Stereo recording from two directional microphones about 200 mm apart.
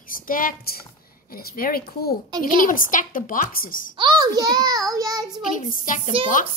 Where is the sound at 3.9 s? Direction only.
20° right (ahead or behind).